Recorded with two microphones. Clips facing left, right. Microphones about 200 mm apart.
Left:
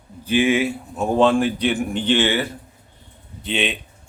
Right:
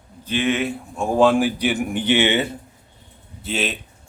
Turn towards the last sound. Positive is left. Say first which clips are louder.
# left 1 dB
turn(degrees=-5)  # may be behind; listen again after turning